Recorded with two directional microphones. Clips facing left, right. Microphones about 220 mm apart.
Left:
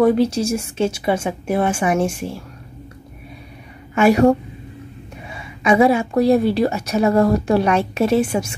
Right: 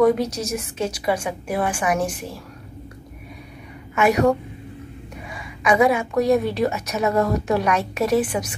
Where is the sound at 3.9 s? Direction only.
30° left (ahead or behind).